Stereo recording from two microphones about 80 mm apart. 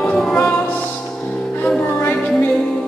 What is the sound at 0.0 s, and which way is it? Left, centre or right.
Music, centre.